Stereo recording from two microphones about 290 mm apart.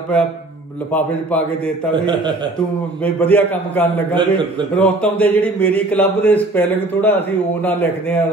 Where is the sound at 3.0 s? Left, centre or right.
Centre.